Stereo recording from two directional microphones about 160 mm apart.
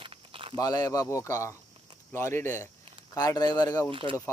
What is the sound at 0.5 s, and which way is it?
A man's voice, 25° left (ahead or behind).